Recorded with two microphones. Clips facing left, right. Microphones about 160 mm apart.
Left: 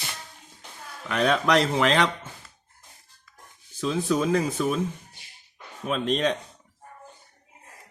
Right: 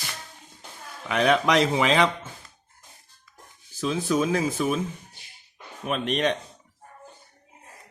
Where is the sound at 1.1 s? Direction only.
Centre (ahead or behind).